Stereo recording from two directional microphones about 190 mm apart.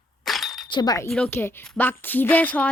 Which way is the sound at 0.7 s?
20° left (ahead or behind).